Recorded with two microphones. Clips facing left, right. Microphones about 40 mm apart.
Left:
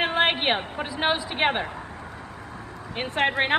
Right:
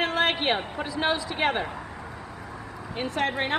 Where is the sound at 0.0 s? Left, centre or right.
Left.